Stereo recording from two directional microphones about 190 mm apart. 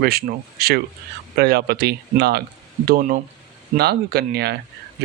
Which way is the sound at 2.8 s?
45° right (ahead or behind).